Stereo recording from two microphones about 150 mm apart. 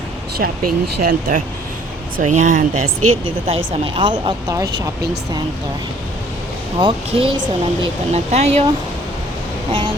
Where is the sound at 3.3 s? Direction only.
40° right (ahead or behind); by 4.7 s 20° right (ahead or behind).